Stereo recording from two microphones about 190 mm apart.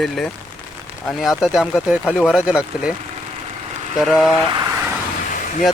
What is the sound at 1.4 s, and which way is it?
Speech, centre (ahead or behind).